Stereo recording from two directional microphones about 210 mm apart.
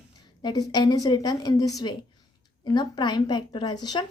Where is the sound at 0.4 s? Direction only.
20° left (ahead or behind).